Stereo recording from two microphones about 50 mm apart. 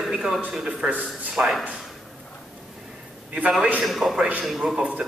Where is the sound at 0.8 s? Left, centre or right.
Right.